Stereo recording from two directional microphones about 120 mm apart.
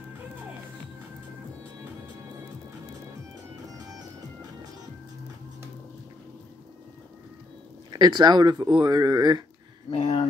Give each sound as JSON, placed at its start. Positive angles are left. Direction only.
{"t": 3.7, "sound": "music", "side_deg": -30}
{"t": 7.9, "sound": "speech", "side_deg": -35}
{"t": 9.8, "sound": "speech", "side_deg": 55}